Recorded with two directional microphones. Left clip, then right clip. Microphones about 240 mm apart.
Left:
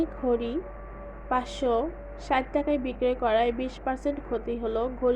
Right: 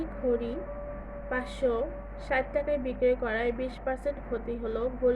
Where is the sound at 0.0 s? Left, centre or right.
Left.